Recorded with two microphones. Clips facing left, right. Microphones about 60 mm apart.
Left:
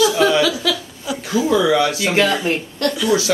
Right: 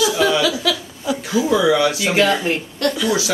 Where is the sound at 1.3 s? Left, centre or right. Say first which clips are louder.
Left 1 dB; centre.